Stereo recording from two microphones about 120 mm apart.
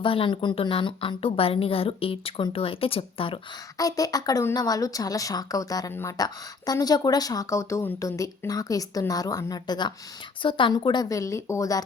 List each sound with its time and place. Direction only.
0.0 s a woman's voice: 45° left (ahead or behind)
3.8 s a woman's voice: 30° left (ahead or behind)
6.1 s a woman's voice: 35° left (ahead or behind)